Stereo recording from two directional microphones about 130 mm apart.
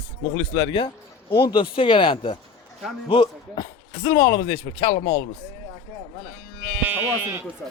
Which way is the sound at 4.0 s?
25° left (ahead or behind).